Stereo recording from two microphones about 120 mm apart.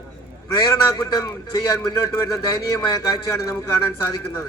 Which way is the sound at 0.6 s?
30° left (ahead or behind).